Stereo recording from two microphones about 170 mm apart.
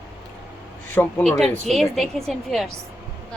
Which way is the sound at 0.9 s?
10° left (ahead or behind).